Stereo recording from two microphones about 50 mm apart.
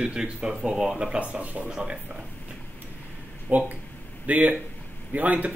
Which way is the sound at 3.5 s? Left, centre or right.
Right.